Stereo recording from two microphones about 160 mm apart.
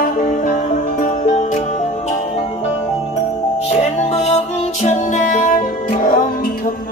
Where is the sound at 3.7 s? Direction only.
40° left (ahead or behind); by 6.5 s 60° left (ahead or behind).